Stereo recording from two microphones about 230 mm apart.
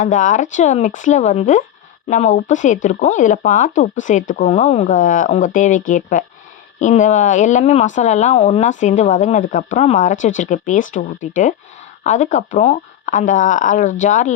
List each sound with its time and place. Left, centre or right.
0.0 s speech: left